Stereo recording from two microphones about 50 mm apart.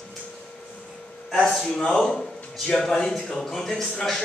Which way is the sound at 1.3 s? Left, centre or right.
Centre.